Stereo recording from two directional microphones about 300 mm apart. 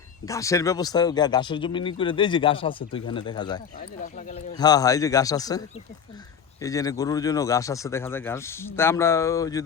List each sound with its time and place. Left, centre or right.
0.3 s speech: centre
3.8 s speech: left
4.5 s speech: centre